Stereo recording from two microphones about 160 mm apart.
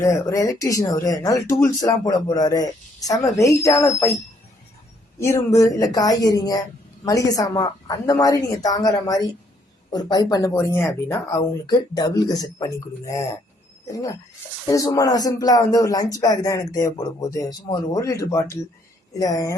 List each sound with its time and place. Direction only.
0.0 s speech: 20° left (ahead or behind)
5.2 s speech: 15° left (ahead or behind)
14.7 s speech: 20° left (ahead or behind)